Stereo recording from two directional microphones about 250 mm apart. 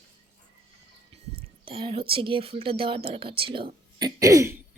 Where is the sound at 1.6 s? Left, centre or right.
Right.